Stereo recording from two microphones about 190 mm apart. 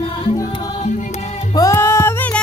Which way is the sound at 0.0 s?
30° left (ahead or behind).